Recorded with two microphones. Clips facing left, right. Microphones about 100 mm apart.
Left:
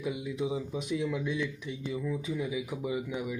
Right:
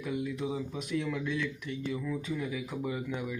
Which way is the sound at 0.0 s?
15° left (ahead or behind).